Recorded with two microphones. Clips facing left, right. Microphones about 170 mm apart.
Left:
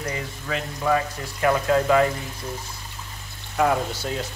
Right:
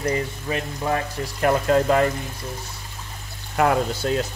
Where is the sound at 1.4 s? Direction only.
45° right (ahead or behind).